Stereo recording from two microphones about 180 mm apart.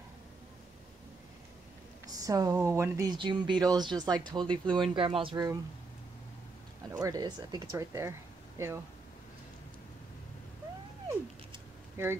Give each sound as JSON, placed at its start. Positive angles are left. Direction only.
{"t": 2.0, "sound": "speech", "side_deg": -20}
{"t": 6.9, "sound": "speech", "side_deg": -20}